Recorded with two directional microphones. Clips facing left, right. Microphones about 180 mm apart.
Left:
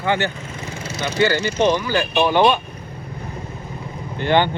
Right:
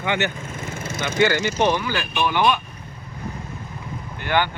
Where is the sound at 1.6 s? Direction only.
15° left (ahead or behind).